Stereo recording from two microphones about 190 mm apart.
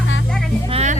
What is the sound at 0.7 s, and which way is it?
Speech, 35° right (ahead or behind).